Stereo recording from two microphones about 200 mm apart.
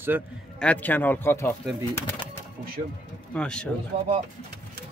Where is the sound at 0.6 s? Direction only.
10° left (ahead or behind).